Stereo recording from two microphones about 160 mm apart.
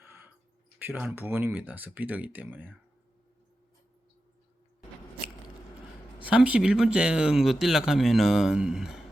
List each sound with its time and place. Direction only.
0.0 s a sound: 15° right (ahead or behind)
0.9 s speech: 10° right (ahead or behind)
6.2 s speech: 10° right (ahead or behind)